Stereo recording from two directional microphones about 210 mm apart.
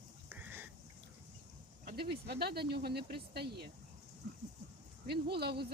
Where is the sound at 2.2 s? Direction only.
50° right (ahead or behind).